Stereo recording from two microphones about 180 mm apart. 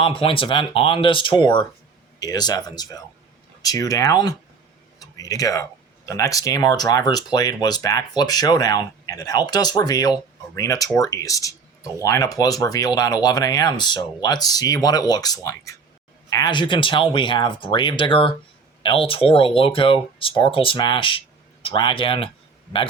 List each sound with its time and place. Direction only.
0.0 s speech: 30° left (ahead or behind)